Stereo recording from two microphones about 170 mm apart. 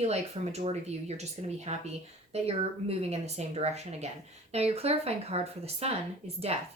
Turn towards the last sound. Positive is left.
turn(degrees=-35)  # may be behind; listen again after turning